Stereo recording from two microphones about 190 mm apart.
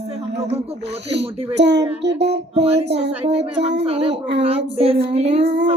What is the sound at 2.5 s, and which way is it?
Speech, 30° right (ahead or behind).